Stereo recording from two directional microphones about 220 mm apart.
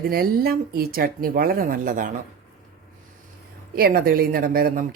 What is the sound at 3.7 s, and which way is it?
Speech, 45° right (ahead or behind).